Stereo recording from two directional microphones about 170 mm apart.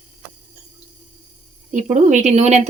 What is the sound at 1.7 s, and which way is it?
Speech, 45° right (ahead or behind).